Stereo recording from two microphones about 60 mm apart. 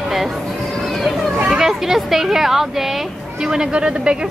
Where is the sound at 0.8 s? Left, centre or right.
Centre.